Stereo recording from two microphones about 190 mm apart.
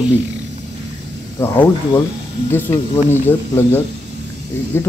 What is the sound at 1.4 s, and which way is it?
Speech, 10° left (ahead or behind).